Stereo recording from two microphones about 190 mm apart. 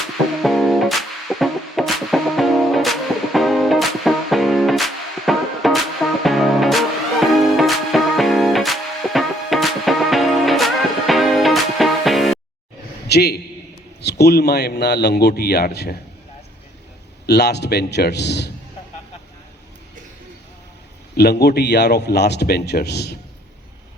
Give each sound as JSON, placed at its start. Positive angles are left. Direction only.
{"t": 0.4, "sound": "music", "side_deg": 0}
{"t": 13.1, "sound": "a man's voice", "side_deg": 55}
{"t": 17.2, "sound": "a man's voice", "side_deg": 60}
{"t": 21.2, "sound": "a man's voice", "side_deg": 60}